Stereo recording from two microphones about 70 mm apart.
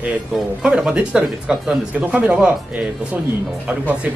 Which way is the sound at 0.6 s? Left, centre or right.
Centre.